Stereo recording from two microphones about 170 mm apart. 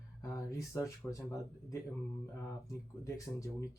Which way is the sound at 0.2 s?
15° left (ahead or behind).